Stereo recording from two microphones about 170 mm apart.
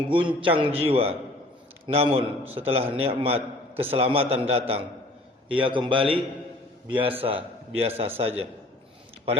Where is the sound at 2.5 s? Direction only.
35° right (ahead or behind).